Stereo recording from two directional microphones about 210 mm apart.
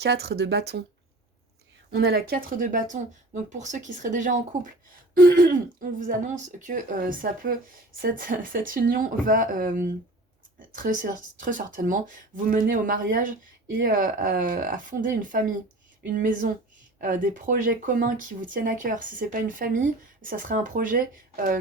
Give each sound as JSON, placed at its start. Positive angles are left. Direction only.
{"t": 0.0, "sound": "speech", "side_deg": -50}
{"t": 1.9, "sound": "speech", "side_deg": -50}